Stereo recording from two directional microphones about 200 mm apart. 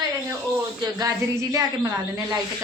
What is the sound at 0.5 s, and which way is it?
A woman's voice, 15° right (ahead or behind).